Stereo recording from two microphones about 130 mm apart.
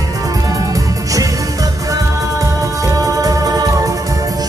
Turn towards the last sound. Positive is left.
turn(degrees=-30)  # may be behind; listen again after turning